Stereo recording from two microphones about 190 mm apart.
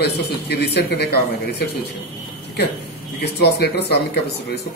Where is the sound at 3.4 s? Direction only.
60° left (ahead or behind).